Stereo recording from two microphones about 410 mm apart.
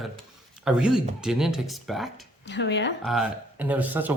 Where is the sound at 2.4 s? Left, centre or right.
Left.